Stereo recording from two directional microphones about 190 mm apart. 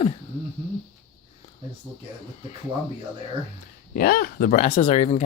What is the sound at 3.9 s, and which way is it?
Speech, 50° left (ahead or behind).